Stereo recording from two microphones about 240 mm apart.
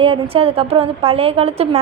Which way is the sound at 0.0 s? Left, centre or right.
Right.